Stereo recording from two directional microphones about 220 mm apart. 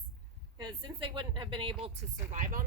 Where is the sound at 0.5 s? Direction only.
20° right (ahead or behind).